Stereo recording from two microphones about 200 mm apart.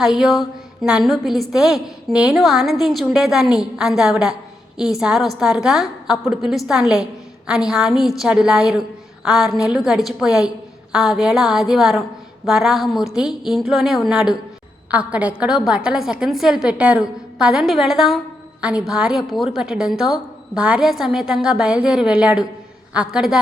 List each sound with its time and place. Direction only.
0.0 s a woman's voice: centre (ahead or behind)